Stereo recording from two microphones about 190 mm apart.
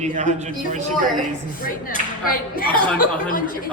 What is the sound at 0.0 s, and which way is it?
Speech, 40° right (ahead or behind).